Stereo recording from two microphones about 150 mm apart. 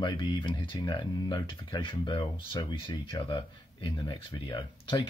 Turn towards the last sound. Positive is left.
turn(degrees=35)  # may be behind; listen again after turning